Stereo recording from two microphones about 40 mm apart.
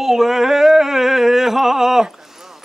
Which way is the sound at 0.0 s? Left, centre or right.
Centre.